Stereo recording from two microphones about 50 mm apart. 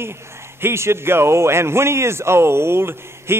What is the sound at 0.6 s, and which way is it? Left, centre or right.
A man's voice, right.